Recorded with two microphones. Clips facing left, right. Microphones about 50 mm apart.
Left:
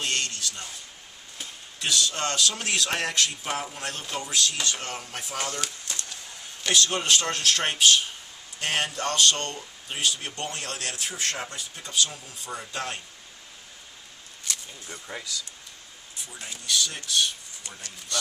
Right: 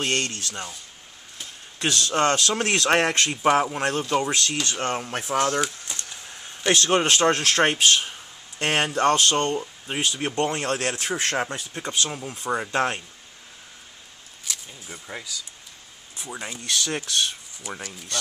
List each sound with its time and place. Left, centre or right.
0.0 s speech: right
1.8 s speech: right
5.9 s a sound: centre
6.7 s speech: right
14.5 s speech: centre
16.2 s speech: right
17.6 s speech: centre